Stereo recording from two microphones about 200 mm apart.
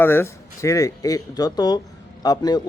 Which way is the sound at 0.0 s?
10° left (ahead or behind).